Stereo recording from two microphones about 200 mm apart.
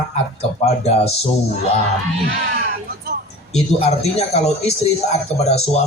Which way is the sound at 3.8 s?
30° left (ahead or behind).